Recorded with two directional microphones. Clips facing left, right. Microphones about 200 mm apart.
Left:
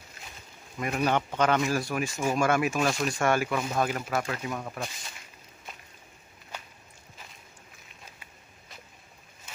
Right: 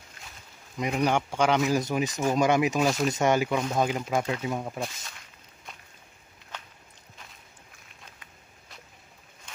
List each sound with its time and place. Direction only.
0.7 s speech: 15° right (ahead or behind)
6.5 s walk: 10° left (ahead or behind)